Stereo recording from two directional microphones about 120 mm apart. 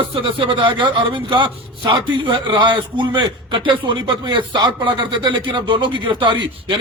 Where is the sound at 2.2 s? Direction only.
40° right (ahead or behind).